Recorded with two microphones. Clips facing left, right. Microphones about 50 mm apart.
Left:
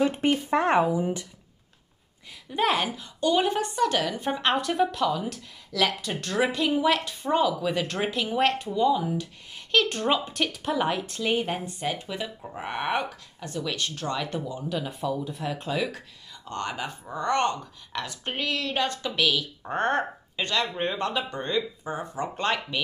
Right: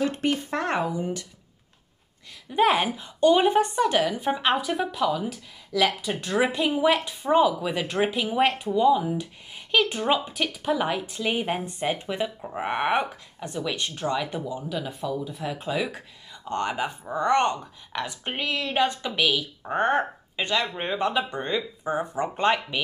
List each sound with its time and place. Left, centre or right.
0.0 s speech: centre
2.7 s speech: right
4.2 s speech: centre
11.6 s speech: right
14.1 s speech: centre
16.4 s speech: right